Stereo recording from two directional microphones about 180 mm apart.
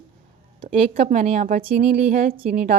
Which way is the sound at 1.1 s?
35° right (ahead or behind).